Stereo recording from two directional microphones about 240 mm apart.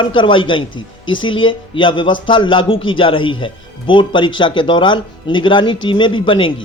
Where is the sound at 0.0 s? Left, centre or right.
Centre.